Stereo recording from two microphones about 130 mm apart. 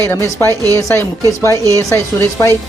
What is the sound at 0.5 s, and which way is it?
Speech, 25° right (ahead or behind).